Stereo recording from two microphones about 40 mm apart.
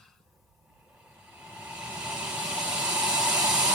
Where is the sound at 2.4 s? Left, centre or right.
Centre.